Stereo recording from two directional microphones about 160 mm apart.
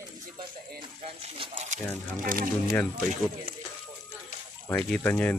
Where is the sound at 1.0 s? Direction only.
40° right (ahead or behind).